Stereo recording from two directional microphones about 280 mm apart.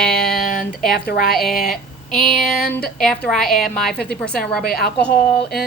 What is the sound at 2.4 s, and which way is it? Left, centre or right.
A woman's voice, centre.